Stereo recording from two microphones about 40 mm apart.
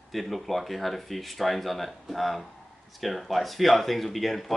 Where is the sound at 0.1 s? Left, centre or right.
Centre.